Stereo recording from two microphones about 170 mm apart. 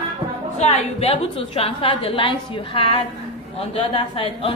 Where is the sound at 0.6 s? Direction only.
35° left (ahead or behind).